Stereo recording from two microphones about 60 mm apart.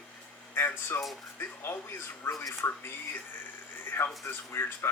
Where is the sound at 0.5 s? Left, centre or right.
Left.